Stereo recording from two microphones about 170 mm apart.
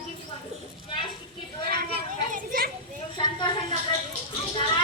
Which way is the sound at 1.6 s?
65° right (ahead or behind).